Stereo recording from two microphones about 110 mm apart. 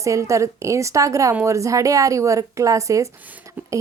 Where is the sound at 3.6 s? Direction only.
15° right (ahead or behind).